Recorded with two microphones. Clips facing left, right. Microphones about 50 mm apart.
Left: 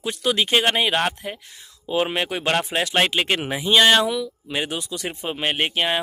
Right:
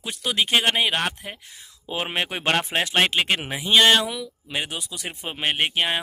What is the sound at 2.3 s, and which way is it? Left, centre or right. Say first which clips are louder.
Speech: left 1 dB; right.